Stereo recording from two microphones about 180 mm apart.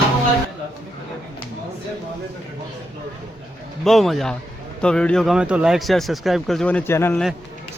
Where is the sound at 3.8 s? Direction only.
Centre (ahead or behind).